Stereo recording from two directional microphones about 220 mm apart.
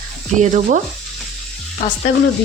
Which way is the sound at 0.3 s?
35° right (ahead or behind).